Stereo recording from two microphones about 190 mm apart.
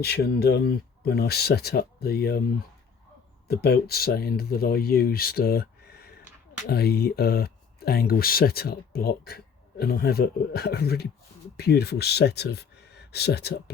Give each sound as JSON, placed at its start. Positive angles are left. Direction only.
{"t": 0.0, "sound": "speech", "side_deg": 60}
{"t": 3.4, "sound": "speech", "side_deg": 55}